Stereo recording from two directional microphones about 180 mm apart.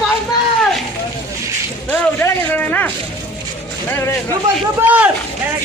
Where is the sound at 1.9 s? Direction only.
10° left (ahead or behind).